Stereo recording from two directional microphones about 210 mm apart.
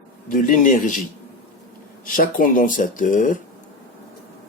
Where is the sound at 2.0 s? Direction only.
40° left (ahead or behind).